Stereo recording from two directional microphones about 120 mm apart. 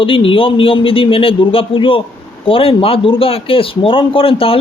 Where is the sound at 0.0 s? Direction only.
50° left (ahead or behind).